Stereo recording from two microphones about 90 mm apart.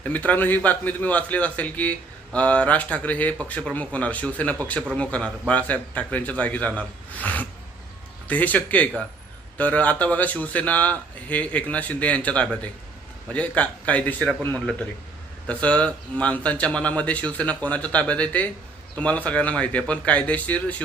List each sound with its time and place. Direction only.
0.0 s a man's voice: 15° left (ahead or behind)
15.4 s a man's voice: 15° left (ahead or behind)